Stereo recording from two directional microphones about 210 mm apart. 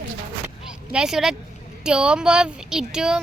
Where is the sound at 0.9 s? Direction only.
5° right (ahead or behind).